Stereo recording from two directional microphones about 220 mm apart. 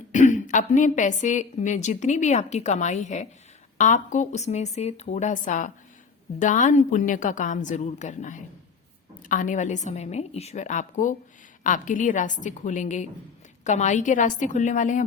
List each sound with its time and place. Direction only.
0.1 s speech: 35° left (ahead or behind)